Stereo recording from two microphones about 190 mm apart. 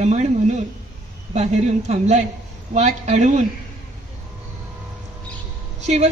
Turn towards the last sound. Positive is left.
turn(degrees=-35)  # may be behind; listen again after turning